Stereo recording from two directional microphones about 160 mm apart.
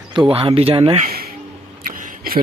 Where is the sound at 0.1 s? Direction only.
35° right (ahead or behind).